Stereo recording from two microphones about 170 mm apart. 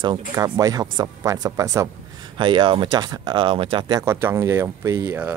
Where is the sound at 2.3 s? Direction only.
30° right (ahead or behind).